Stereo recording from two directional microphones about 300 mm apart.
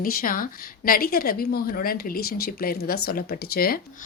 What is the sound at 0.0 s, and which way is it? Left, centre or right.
A woman's voice, left.